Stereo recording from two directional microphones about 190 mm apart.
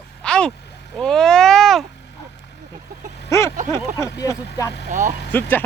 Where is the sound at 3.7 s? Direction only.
15° left (ahead or behind).